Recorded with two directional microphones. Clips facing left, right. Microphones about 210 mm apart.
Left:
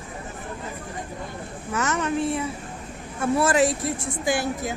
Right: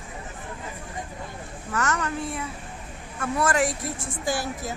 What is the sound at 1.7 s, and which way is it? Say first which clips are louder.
Speech: left 3 dB; 20° left (ahead or behind).